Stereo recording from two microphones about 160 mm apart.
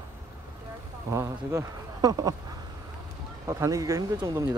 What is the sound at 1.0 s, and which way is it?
Speech, 20° right (ahead or behind).